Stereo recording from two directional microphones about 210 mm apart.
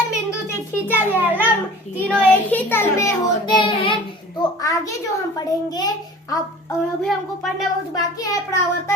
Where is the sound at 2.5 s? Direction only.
10° left (ahead or behind).